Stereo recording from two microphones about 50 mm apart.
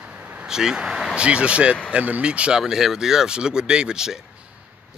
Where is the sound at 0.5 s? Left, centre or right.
Centre.